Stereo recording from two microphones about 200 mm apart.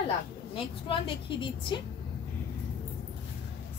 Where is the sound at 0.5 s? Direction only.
25° left (ahead or behind).